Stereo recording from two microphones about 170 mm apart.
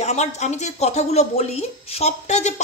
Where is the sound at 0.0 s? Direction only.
40° left (ahead or behind).